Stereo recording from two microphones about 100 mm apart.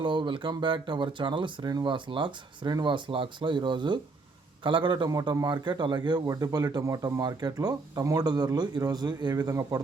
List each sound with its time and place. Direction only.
0.0 s a man's voice: 50° right (ahead or behind)
5.0 s a man's voice: 40° right (ahead or behind)